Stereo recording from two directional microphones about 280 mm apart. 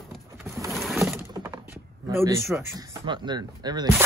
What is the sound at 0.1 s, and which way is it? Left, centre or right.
Vehicle, centre.